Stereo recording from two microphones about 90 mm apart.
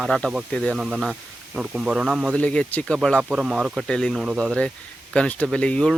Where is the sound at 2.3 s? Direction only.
15° left (ahead or behind).